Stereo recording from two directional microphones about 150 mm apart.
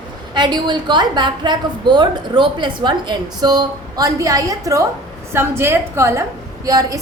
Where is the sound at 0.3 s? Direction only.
30° right (ahead or behind).